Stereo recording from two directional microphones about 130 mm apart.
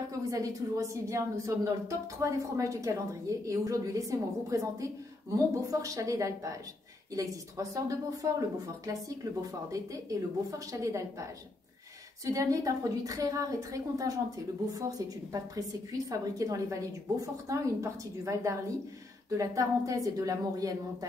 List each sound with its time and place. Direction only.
0.3 s a woman's voice: 25° right (ahead or behind)
12.3 s a woman's voice: 25° right (ahead or behind)